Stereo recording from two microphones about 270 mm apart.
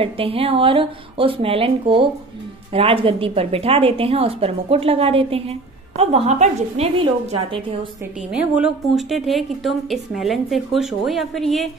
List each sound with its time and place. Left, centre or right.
0.0 s a woman's voice: right
8.3 s a woman's voice: centre